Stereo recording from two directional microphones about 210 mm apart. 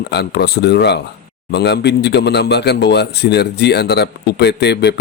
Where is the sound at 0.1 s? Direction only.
50° left (ahead or behind).